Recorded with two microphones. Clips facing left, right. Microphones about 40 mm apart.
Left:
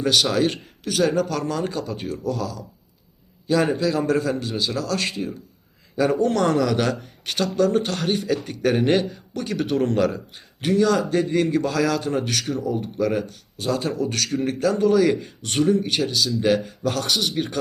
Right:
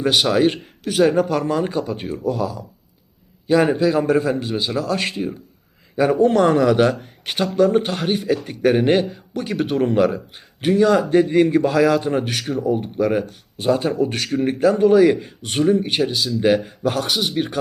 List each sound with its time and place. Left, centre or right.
0.0 s a man's voice: right